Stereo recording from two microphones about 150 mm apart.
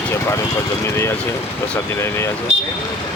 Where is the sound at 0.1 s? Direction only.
20° left (ahead or behind).